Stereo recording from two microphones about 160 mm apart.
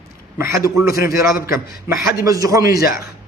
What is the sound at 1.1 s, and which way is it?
Speech, 70° left (ahead or behind).